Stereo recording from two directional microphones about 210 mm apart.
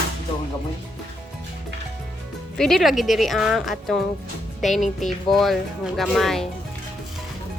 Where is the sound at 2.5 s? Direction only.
Centre (ahead or behind).